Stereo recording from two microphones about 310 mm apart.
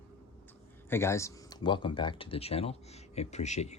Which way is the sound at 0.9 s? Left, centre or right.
Centre.